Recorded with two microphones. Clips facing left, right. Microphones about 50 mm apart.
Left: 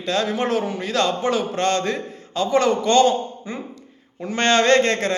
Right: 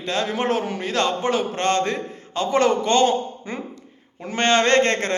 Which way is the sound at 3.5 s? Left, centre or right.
Right.